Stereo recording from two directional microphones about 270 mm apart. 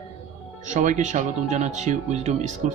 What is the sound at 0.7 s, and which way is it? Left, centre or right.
Speech, right.